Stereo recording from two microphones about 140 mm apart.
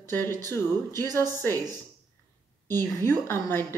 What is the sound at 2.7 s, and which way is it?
Speech, 15° left (ahead or behind).